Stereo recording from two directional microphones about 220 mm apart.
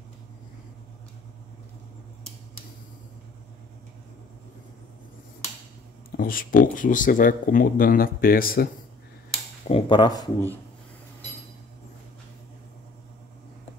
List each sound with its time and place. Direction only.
6.1 s speech: 40° left (ahead or behind)
9.7 s speech: 25° left (ahead or behind)